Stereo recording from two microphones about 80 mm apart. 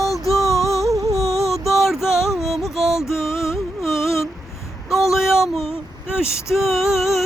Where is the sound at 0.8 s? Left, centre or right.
Centre.